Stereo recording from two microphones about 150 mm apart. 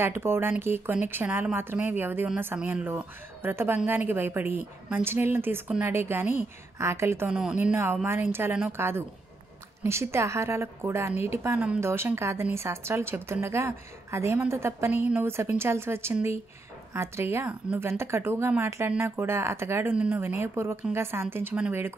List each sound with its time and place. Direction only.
0.0 s a woman's voice: 15° right (ahead or behind)